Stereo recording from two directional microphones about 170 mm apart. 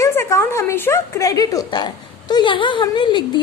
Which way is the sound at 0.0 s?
15° left (ahead or behind).